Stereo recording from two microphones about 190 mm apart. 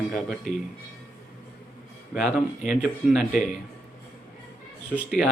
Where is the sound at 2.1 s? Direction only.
5° right (ahead or behind).